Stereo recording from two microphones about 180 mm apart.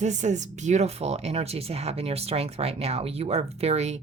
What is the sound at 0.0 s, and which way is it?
Speech, 40° right (ahead or behind).